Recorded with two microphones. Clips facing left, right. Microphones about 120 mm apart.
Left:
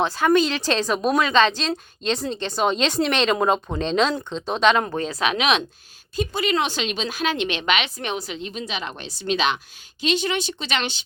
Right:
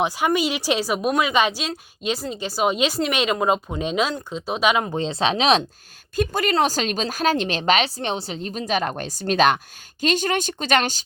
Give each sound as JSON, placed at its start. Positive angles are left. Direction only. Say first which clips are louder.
{"t": 0.3, "sound": "a woman's voice", "louder": "left 6 dB", "side_deg": -10}
{"t": 4.9, "sound": "speech", "louder": "right 2 dB", "side_deg": -25}
{"t": 6.1, "sound": "a woman's voice", "louder": "right 2 dB", "side_deg": -45}